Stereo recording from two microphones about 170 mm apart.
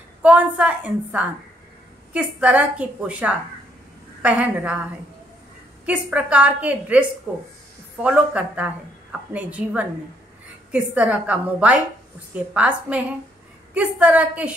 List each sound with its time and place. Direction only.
0.2 s a woman's voice: 10° right (ahead or behind)
5.9 s a woman's voice: 5° right (ahead or behind)